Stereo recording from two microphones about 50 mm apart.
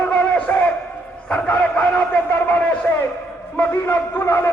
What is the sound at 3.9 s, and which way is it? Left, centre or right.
Speech, left.